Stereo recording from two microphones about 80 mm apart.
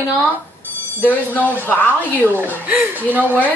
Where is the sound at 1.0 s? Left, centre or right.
Left.